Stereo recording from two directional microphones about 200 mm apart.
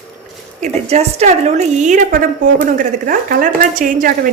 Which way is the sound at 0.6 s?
30° right (ahead or behind).